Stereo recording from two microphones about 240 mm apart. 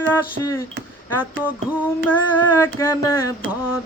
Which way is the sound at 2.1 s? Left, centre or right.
Centre.